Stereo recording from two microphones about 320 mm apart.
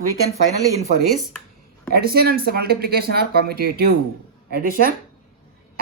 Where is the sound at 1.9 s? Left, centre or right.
Right.